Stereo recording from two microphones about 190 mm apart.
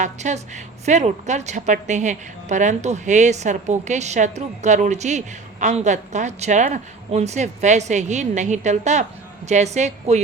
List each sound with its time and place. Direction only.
0.0 s a woman's voice: 40° right (ahead or behind)